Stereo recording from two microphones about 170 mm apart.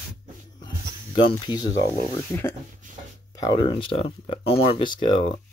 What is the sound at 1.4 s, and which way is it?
Speech, 25° left (ahead or behind).